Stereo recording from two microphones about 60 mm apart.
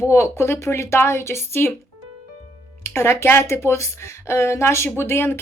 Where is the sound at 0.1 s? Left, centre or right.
Left.